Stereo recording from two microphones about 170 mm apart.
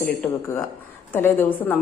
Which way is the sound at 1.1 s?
10° left (ahead or behind).